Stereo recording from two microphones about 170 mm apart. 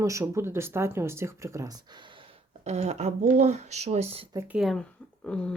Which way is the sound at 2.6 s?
40° right (ahead or behind).